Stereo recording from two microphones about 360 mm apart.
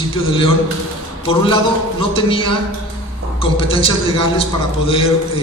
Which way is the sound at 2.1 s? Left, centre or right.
Centre.